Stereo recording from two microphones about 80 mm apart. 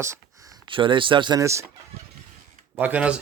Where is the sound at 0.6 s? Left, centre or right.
Right.